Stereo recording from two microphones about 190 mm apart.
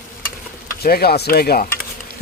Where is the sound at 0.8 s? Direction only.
55° left (ahead or behind).